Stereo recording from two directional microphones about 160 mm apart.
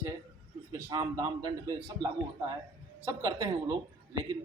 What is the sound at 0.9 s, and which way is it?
A man's voice, 25° right (ahead or behind).